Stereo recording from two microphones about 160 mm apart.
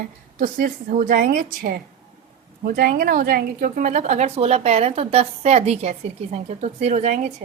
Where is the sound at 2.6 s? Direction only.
70° right (ahead or behind); by 7.3 s 45° right (ahead or behind).